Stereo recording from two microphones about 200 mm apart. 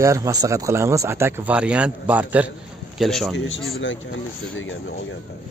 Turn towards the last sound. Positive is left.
turn(degrees=70)  # may be behind; listen again after turning